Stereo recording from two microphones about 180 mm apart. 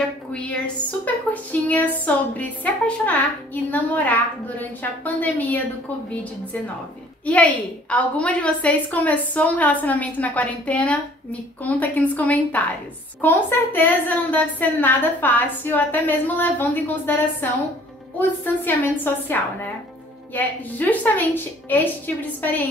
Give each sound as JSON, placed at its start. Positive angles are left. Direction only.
{"t": 0.3, "sound": "a sound", "side_deg": 5}
{"t": 1.0, "sound": "a woman's voice", "side_deg": 10}
{"t": 7.2, "sound": "a woman's voice", "side_deg": 5}